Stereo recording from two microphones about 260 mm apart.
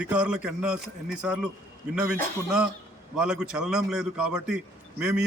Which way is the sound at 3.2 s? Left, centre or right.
Centre.